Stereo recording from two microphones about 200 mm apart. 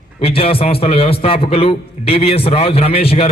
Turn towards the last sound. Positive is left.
turn(degrees=30)  # may be behind; listen again after turning